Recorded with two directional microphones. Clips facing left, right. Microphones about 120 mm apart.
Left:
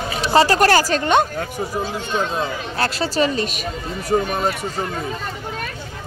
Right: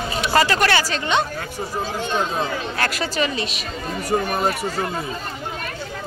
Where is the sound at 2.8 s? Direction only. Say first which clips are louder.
Left 5 dB; 30° left (ahead or behind); by 3.7 s 45° left (ahead or behind).